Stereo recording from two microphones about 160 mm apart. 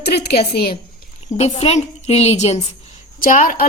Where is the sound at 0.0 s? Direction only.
80° left.